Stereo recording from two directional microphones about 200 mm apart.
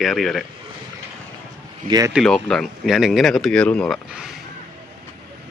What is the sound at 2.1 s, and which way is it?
Speech, 5° left (ahead or behind).